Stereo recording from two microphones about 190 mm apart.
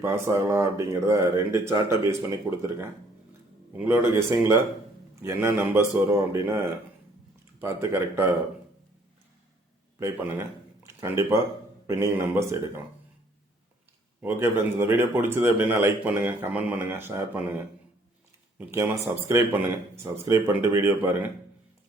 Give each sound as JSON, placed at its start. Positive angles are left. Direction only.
{"t": 0.0, "sound": "speech", "side_deg": -15}
{"t": 10.0, "sound": "speech", "side_deg": -15}
{"t": 14.2, "sound": "speech", "side_deg": -10}